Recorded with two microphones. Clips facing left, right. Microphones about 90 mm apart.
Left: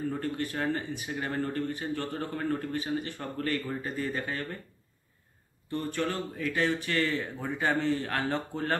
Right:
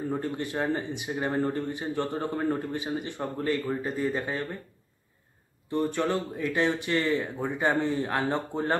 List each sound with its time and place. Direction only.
0.1 s speech: 20° right (ahead or behind)
5.7 s speech: 20° right (ahead or behind)